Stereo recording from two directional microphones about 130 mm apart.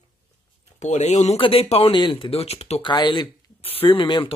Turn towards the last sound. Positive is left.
turn(degrees=40)  # may be behind; listen again after turning